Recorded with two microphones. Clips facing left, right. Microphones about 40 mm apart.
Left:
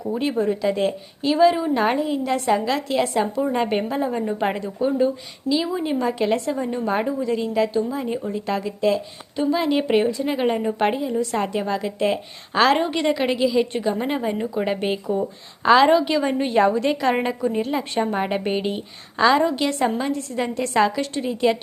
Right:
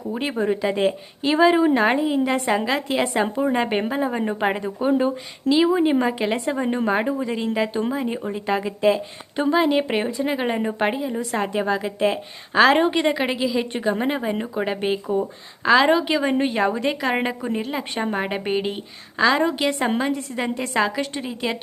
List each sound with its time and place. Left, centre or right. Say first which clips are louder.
0.0 s a woman's voice: left 2 dB; centre
1.7 s a woman's voice: right 2 dB; centre
9.3 s speech: even; right
9.6 s a woman's voice: even; centre